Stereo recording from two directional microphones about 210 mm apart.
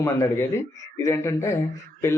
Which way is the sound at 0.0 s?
10° left (ahead or behind).